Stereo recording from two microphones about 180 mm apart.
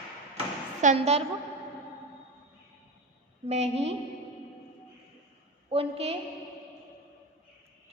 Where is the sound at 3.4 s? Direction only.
35° right (ahead or behind).